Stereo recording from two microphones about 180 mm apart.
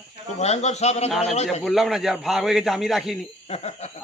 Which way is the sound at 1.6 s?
Centre (ahead or behind).